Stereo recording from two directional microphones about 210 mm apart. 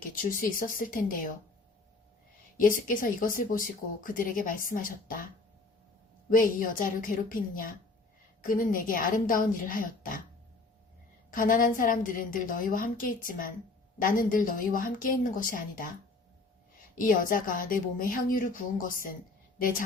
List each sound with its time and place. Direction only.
0.2 s speech: 40° left (ahead or behind)
2.6 s speech: 40° left (ahead or behind)
6.3 s speech: 40° left (ahead or behind)
11.3 s speech: 40° left (ahead or behind)
16.9 s speech: 40° left (ahead or behind)